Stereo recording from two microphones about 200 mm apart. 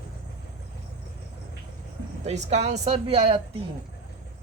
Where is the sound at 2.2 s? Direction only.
35° right (ahead or behind).